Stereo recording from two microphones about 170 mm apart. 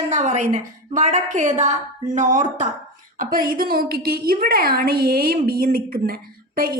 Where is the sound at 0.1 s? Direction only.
45° right (ahead or behind).